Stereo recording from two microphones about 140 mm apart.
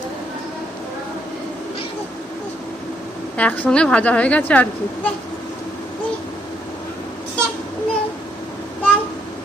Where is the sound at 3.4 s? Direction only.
10° left (ahead or behind).